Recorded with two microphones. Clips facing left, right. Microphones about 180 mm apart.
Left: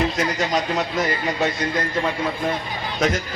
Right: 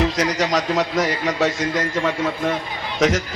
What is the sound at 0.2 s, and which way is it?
A man's voice, 90° right.